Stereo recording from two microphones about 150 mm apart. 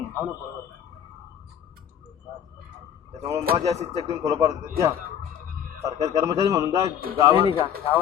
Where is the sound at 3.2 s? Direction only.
20° right (ahead or behind).